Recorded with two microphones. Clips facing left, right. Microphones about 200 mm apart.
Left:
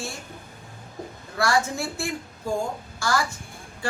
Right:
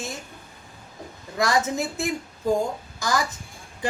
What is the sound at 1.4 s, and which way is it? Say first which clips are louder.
A woman's voice: right 1 dB; 20° right (ahead or behind).